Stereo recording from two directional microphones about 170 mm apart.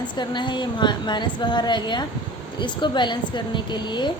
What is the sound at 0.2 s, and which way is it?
A woman's voice, 25° left (ahead or behind).